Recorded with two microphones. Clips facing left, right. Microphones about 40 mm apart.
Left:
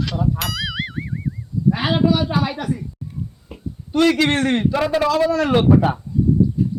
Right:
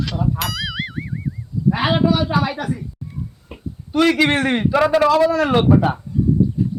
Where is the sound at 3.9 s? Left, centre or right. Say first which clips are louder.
Right 1 dB; centre.